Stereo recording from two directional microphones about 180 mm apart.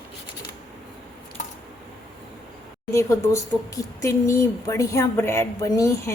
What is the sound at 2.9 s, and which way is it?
Speech, 15° left (ahead or behind).